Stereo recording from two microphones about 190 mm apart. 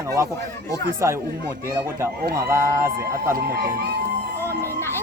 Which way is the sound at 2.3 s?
15° right (ahead or behind).